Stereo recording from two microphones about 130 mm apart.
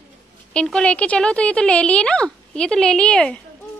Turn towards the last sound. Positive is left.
turn(degrees=5)  # may be behind; listen again after turning